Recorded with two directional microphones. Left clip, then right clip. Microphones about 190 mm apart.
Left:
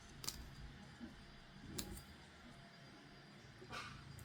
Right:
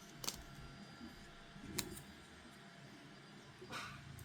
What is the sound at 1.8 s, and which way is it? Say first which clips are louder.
Vehicle: right 5 dB; 10° right (ahead or behind).